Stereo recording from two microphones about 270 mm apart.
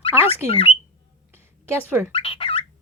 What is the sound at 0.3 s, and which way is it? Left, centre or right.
Speech, left.